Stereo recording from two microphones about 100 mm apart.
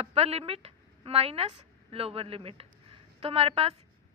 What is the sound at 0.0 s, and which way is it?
A woman's voice, 90° right.